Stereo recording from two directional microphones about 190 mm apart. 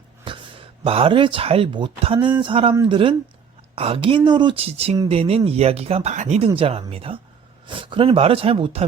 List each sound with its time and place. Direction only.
0.9 s speech: 30° right (ahead or behind)